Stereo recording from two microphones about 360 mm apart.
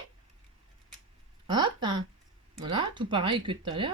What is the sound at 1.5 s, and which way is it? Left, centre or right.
Speech, centre.